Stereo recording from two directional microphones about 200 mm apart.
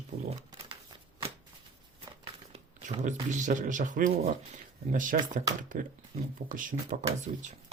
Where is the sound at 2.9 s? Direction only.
35° right (ahead or behind).